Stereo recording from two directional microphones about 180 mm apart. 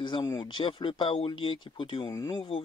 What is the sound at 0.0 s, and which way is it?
Speech, 25° left (ahead or behind).